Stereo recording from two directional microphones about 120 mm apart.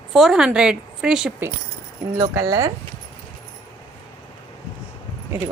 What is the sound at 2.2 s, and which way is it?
Speech, 30° right (ahead or behind).